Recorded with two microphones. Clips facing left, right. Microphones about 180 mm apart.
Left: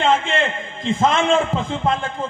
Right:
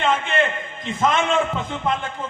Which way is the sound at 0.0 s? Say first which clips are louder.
Left 2 dB; 25° left (ahead or behind).